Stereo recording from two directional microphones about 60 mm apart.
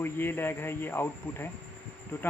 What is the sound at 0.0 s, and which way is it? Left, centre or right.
Speech, left.